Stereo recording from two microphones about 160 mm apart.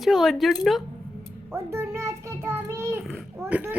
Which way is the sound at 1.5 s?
15° right (ahead or behind).